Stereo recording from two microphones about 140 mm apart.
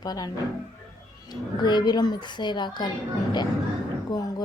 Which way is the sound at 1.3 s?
30° left (ahead or behind).